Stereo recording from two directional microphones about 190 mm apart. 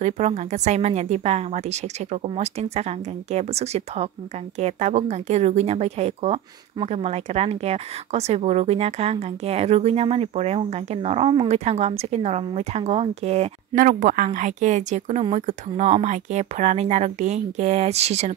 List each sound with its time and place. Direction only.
0.0 s speech: 35° right (ahead or behind)